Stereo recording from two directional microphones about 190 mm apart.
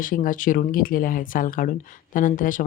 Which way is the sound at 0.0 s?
45° left (ahead or behind).